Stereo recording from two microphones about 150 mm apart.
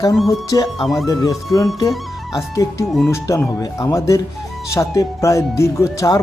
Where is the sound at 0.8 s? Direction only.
Centre (ahead or behind).